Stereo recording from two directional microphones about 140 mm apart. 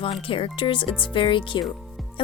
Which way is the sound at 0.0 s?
40° left (ahead or behind).